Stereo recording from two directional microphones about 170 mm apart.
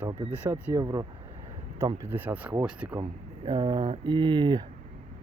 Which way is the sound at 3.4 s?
20° right (ahead or behind).